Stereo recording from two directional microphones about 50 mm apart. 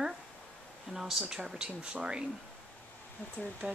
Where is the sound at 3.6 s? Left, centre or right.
Right.